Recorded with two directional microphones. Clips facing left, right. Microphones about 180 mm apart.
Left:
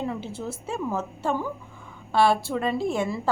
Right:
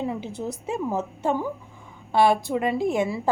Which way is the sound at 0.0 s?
15° right (ahead or behind).